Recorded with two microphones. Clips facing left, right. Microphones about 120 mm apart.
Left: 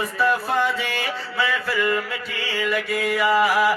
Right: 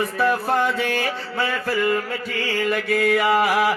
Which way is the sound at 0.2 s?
50° right (ahead or behind).